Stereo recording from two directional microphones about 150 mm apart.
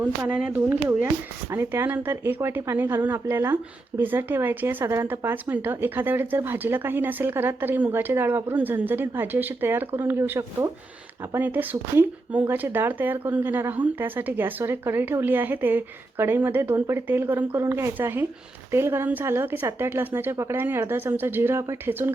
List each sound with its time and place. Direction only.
0.0 s speech: 10° right (ahead or behind)